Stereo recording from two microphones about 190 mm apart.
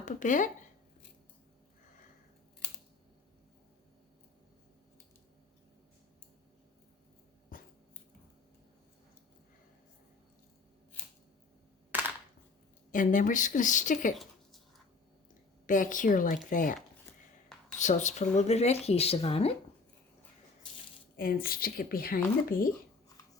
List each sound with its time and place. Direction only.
0.0 s speech: 40° left (ahead or behind)
7.5 s dog: 50° left (ahead or behind)
12.9 s speech: 45° left (ahead or behind)
15.6 s speech: 45° left (ahead or behind)
17.7 s speech: 40° left (ahead or behind)
21.2 s speech: 50° left (ahead or behind)